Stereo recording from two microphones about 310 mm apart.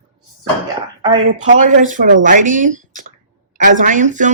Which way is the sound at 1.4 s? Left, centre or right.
Right.